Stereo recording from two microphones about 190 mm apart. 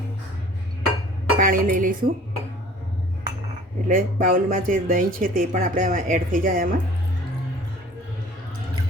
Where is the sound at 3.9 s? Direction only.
45° right (ahead or behind).